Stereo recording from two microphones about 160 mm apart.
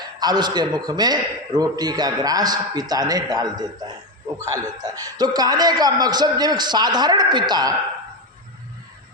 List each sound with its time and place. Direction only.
0.2 s a man's voice: 25° right (ahead or behind)